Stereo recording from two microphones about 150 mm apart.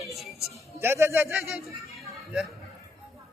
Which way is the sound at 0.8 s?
15° right (ahead or behind).